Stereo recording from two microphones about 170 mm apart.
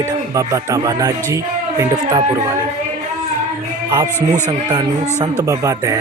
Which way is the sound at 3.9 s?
25° right (ahead or behind).